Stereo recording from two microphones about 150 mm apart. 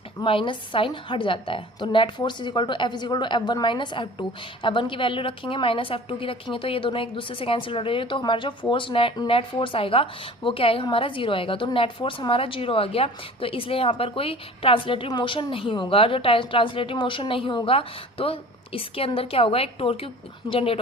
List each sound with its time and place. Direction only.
0.2 s a woman's voice: 35° left (ahead or behind)